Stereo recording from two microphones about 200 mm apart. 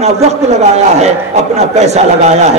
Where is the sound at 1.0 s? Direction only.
35° right (ahead or behind).